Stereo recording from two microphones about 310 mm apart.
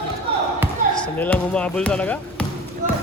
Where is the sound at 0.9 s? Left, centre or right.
Centre.